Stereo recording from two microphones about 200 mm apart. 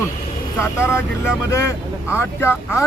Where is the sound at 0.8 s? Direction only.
10° left (ahead or behind).